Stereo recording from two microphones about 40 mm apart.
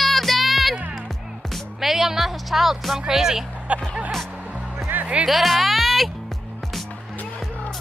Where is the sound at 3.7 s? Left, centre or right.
Right.